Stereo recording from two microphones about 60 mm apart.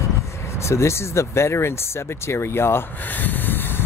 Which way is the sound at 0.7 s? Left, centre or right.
Left.